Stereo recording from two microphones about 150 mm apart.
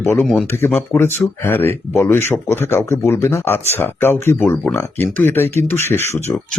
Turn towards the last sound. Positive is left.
turn(degrees=15)  # may be behind; listen again after turning